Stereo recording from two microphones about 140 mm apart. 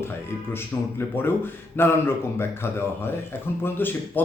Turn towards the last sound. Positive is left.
turn(degrees=15)  # may be behind; listen again after turning